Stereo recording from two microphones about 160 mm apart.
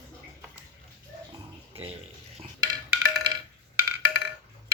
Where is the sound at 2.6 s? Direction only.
25° right (ahead or behind).